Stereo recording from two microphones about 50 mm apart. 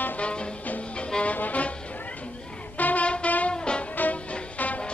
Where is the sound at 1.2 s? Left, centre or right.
Left.